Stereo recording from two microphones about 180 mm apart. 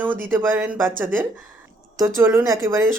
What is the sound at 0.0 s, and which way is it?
Speech, 10° right (ahead or behind).